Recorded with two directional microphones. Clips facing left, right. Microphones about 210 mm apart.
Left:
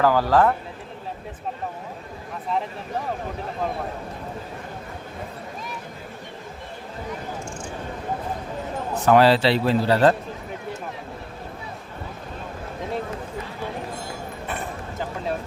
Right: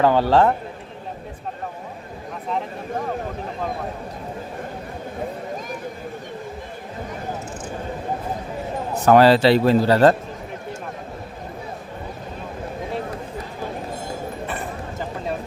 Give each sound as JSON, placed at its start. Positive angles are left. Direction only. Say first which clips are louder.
{"t": 0.0, "sound": "a man's voice", "louder": "right 2 dB", "side_deg": -25}
{"t": 9.0, "sound": "speech", "louder": "right 3 dB", "side_deg": -45}